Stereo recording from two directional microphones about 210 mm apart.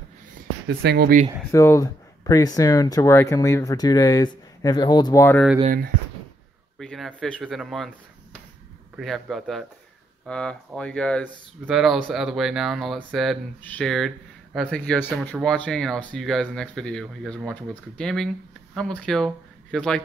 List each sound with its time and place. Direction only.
0.3 s a sound: 45° right (ahead or behind)
1.5 s speech: 15° left (ahead or behind)
6.8 s speech: centre (ahead or behind)